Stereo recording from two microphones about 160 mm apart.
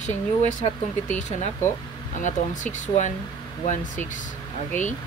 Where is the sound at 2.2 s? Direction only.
50° left (ahead or behind).